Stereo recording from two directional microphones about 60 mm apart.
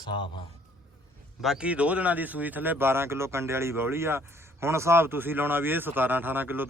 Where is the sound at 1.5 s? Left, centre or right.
Centre.